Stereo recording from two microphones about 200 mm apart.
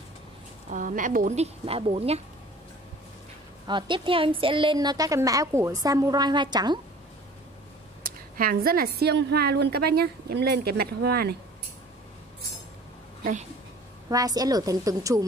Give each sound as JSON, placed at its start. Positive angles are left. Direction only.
{"t": 0.7, "sound": "speech", "side_deg": -40}
{"t": 3.6, "sound": "a woman's voice", "side_deg": -25}
{"t": 8.0, "sound": "a woman's voice", "side_deg": -45}
{"t": 13.2, "sound": "speech", "side_deg": -40}
{"t": 14.0, "sound": "a woman's voice", "side_deg": -15}